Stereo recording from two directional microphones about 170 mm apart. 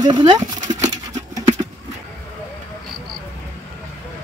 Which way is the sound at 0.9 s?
20° right (ahead or behind).